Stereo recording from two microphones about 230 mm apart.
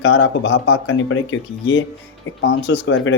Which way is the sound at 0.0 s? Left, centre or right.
Left.